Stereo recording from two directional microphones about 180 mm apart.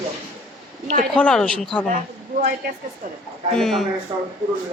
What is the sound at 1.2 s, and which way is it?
Speech, 5° left (ahead or behind).